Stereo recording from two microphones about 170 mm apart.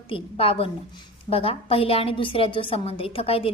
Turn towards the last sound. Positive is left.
turn(degrees=35)  # may be behind; listen again after turning